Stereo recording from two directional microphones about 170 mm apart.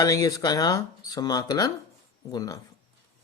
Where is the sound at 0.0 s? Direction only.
20° left (ahead or behind).